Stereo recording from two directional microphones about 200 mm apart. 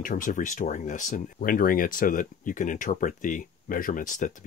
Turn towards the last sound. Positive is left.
turn(degrees=40)  # may be behind; listen again after turning